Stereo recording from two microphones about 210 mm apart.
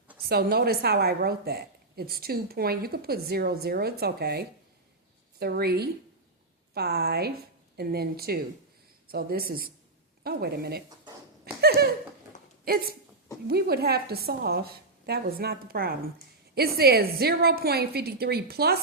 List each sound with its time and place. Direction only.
0.2 s a woman's voice: 45° right (ahead or behind)
11.6 s a sound: 50° right (ahead or behind)
12.6 s a woman's voice: 45° right (ahead or behind)